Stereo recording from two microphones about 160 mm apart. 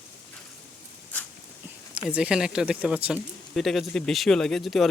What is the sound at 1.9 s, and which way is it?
Speech, 5° right (ahead or behind).